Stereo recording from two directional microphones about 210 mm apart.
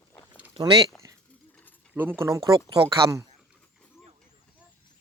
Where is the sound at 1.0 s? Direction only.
20° right (ahead or behind).